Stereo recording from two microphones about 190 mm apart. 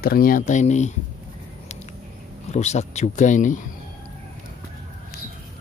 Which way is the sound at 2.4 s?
35° left (ahead or behind).